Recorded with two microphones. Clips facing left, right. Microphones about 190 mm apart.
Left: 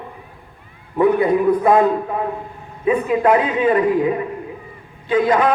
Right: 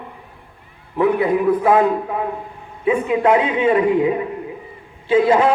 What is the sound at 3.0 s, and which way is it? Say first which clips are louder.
A man's voice: even; 20° right (ahead or behind).